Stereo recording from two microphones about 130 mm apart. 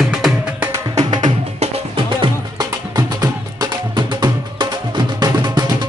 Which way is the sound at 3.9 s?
35° right (ahead or behind).